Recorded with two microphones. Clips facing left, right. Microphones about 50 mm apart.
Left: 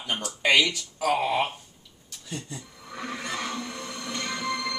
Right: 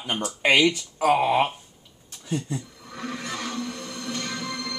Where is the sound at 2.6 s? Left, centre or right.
Centre.